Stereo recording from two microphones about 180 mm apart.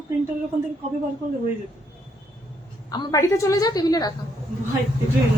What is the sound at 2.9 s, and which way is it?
A woman's voice, 20° left (ahead or behind).